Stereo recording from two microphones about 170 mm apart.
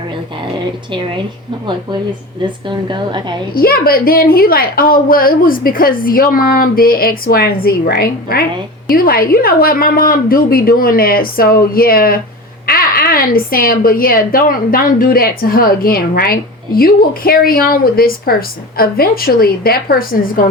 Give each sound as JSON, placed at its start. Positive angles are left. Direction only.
{"t": 0.9, "sound": "a woman's voice", "side_deg": -30}
{"t": 2.6, "sound": "a woman's voice", "side_deg": -25}
{"t": 3.5, "sound": "a woman's voice", "side_deg": 60}